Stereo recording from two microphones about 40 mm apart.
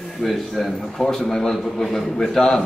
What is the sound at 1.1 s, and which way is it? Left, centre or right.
A man's voice, centre.